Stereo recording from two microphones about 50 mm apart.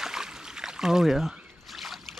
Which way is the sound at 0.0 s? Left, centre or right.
Centre.